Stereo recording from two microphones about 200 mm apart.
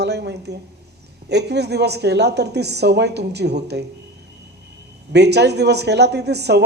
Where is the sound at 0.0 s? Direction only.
55° right (ahead or behind).